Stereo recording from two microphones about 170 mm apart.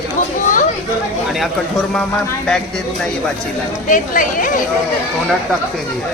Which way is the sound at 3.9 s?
50° left (ahead or behind).